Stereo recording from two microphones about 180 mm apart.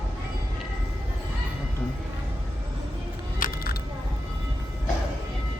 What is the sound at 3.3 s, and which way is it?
Vehicle, 50° left (ahead or behind).